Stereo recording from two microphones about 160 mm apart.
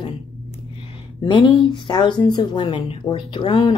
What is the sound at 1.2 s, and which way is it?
Speech, 30° left (ahead or behind).